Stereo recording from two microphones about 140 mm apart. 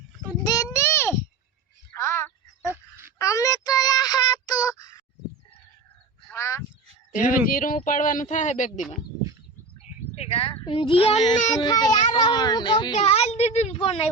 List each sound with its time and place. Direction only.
0.4 s a sound: 25° left (ahead or behind)
3.2 s child singing: 25° left (ahead or behind)
6.3 s honk: 20° left (ahead or behind)
7.1 s speech: 75° left (ahead or behind)
10.2 s a child's voice: 45° left (ahead or behind)
11.5 s a child's voice: 30° left (ahead or behind); by 14.1 s 45° left (ahead or behind)